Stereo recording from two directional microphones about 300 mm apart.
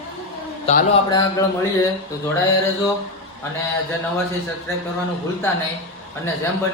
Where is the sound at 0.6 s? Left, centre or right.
Left.